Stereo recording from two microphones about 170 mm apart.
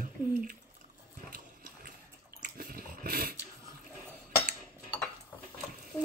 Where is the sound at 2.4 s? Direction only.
55° right (ahead or behind).